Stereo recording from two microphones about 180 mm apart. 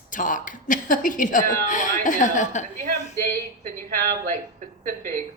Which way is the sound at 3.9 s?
55° right (ahead or behind).